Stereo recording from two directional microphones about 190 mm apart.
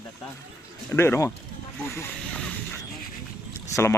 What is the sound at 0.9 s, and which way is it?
Speech, 15° left (ahead or behind).